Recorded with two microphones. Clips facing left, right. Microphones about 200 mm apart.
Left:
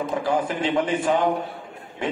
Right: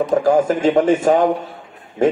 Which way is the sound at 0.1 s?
45° right (ahead or behind).